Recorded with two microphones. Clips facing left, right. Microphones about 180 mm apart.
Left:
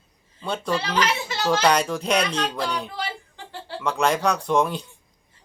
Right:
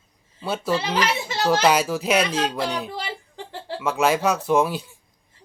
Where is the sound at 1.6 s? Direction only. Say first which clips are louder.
Right 1 dB; 5° right (ahead or behind).